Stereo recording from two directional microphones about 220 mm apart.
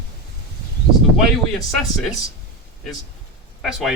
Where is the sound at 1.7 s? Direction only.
Centre (ahead or behind).